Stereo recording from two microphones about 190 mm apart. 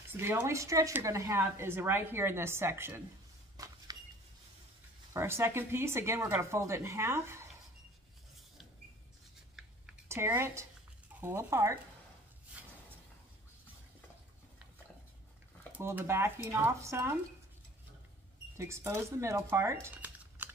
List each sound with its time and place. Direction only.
0.2 s a woman's voice: 10° right (ahead or behind)
3.5 s a sound: 20° right (ahead or behind)
5.1 s a woman's voice: 15° right (ahead or behind)
10.0 s a woman's voice: 15° right (ahead or behind)
15.7 s a woman's voice: 10° right (ahead or behind)
18.6 s speech: 15° right (ahead or behind)